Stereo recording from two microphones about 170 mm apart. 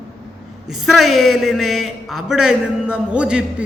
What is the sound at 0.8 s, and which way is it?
A man's voice, centre (ahead or behind).